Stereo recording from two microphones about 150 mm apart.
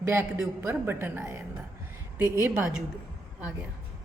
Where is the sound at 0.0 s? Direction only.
15° right (ahead or behind).